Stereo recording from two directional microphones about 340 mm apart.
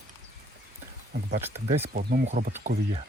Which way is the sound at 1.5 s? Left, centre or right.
Centre.